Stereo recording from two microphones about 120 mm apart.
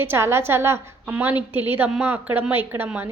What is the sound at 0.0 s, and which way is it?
A woman's voice, 20° right (ahead or behind).